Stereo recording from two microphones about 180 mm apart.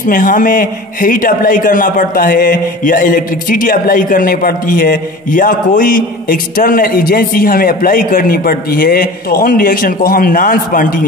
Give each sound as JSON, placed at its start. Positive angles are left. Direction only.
{"t": 0.0, "sound": "a man's voice", "side_deg": 50}